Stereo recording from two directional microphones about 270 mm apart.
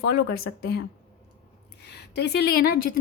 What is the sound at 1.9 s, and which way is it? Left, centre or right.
Speech, left.